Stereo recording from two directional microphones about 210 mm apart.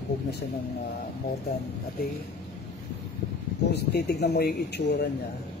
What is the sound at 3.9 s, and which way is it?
Speech, 50° left (ahead or behind).